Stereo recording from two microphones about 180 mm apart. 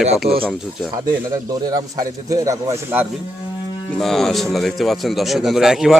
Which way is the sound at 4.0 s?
Centre (ahead or behind).